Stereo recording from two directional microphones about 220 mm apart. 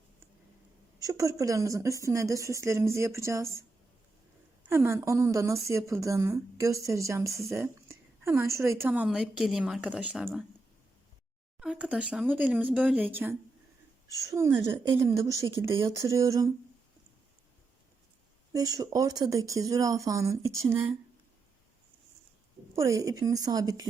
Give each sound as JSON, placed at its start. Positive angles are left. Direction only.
{"t": 0.9, "sound": "a woman's voice", "side_deg": -15}
{"t": 4.7, "sound": "a woman's voice", "side_deg": -10}
{"t": 11.6, "sound": "a woman's voice", "side_deg": -5}
{"t": 18.5, "sound": "a woman's voice", "side_deg": -15}
{"t": 22.7, "sound": "a woman's voice", "side_deg": -15}